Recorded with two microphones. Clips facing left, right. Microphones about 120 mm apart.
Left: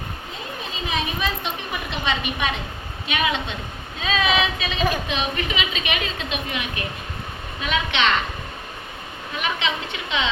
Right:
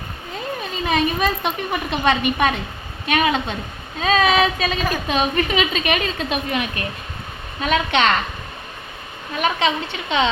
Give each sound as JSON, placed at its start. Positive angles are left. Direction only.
{"t": 0.9, "sound": "a woman's voice", "side_deg": -55}
{"t": 9.3, "sound": "a woman's voice", "side_deg": -40}